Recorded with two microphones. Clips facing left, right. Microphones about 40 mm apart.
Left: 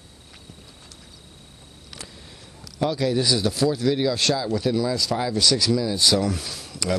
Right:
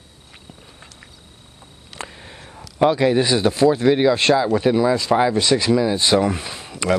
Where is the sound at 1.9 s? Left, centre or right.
Right.